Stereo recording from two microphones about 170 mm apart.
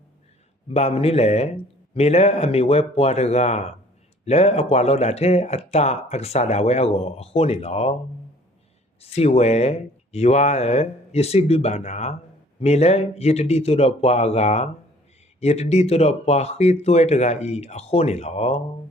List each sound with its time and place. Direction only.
0.7 s speech: 35° left (ahead or behind)
9.0 s speech: 35° left (ahead or behind)